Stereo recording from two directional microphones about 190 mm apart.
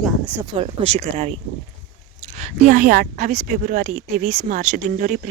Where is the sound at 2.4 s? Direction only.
45° right (ahead or behind).